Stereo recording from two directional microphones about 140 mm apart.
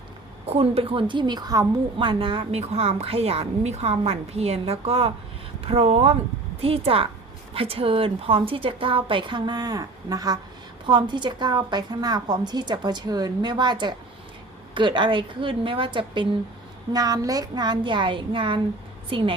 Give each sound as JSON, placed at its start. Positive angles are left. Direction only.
{"t": 0.4, "sound": "a woman's voice", "side_deg": -45}
{"t": 16.9, "sound": "a woman's voice", "side_deg": -25}